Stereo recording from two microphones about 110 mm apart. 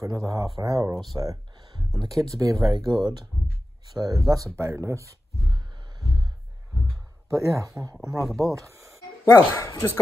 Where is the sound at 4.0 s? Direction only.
35° right (ahead or behind).